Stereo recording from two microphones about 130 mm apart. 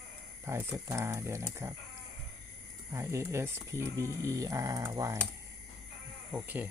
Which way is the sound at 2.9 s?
20° right (ahead or behind).